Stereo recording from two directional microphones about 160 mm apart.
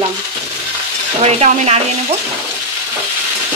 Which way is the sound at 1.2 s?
40° right (ahead or behind).